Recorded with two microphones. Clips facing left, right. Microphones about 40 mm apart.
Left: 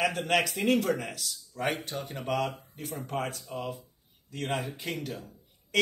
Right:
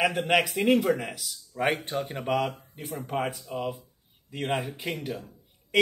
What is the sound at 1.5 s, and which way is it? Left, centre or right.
A woman's voice, right.